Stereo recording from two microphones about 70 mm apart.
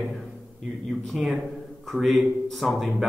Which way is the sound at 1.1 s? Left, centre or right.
Centre.